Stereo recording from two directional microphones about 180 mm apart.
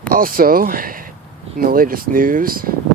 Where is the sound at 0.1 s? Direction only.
50° right (ahead or behind).